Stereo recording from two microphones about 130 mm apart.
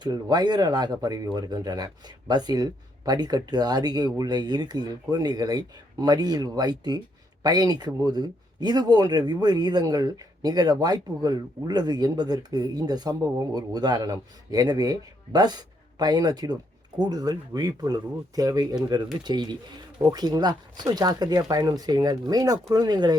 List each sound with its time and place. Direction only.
0.0 s speech: 30° right (ahead or behind)